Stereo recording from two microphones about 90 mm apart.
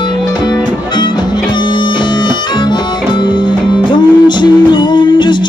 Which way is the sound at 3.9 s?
55° left (ahead or behind).